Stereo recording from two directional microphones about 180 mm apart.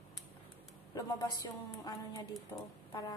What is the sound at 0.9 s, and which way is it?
Speech, 20° left (ahead or behind).